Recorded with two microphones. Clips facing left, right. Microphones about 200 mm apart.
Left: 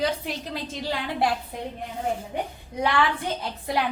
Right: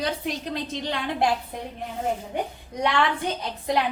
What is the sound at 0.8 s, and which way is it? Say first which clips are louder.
Speech: left 1 dB; 5° left (ahead or behind).